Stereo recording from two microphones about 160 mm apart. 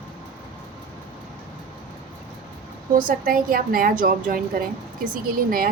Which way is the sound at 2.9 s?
60° right (ahead or behind).